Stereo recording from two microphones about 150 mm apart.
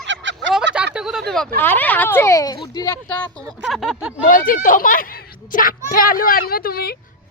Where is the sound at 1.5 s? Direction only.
15° left (ahead or behind).